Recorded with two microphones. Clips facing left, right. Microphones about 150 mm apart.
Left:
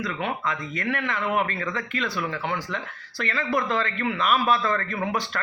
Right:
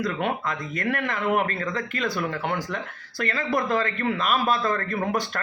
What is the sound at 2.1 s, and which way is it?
Speech, 50° right (ahead or behind).